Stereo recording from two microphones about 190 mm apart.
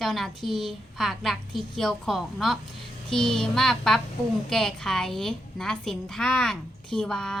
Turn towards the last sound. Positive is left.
turn(degrees=5)  # may be behind; listen again after turning